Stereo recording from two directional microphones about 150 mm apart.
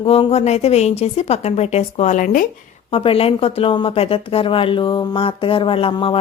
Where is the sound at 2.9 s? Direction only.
40° left (ahead or behind).